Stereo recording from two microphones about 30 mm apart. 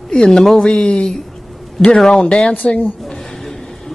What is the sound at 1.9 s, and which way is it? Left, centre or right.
Speech, left.